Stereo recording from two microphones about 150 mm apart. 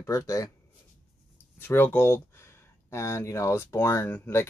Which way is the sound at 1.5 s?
15° left (ahead or behind).